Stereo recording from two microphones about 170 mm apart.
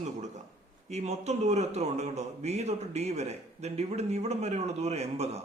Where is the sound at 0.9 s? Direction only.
40° right (ahead or behind).